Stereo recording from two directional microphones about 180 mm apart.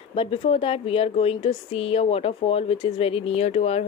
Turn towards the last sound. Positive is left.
turn(degrees=35)  # may be behind; listen again after turning